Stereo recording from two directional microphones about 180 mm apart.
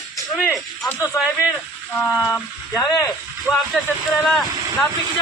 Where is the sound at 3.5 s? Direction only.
Centre (ahead or behind).